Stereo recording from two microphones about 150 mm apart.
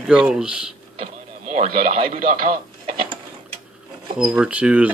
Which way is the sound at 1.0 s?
50° right (ahead or behind).